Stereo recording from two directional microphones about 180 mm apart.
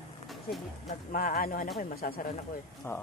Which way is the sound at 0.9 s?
50° left (ahead or behind).